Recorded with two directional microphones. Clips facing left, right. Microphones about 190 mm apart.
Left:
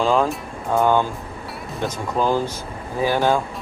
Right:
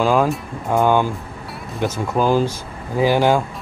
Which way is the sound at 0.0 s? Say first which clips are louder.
Right 2 dB; 5° right (ahead or behind).